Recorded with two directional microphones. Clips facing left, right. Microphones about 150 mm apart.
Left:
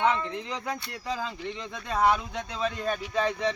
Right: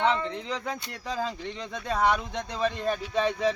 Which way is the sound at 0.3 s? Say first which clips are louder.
Even; 5° left (ahead or behind).